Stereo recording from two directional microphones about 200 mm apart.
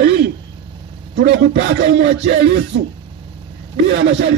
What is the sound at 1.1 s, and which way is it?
Speech, 55° right (ahead or behind).